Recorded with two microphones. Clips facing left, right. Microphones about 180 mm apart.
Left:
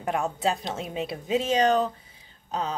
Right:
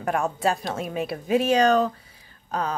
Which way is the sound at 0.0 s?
45° right (ahead or behind).